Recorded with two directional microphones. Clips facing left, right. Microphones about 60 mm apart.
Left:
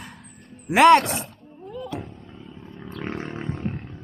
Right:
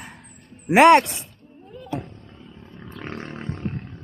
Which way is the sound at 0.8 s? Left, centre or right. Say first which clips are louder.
Right 1 dB; right.